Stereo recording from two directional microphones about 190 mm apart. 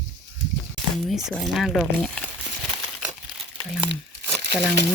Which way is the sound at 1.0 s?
Centre (ahead or behind).